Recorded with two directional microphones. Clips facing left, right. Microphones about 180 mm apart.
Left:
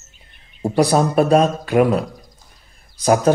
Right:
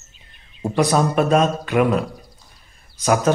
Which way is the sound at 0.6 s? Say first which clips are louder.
Left 2 dB; 35° left (ahead or behind).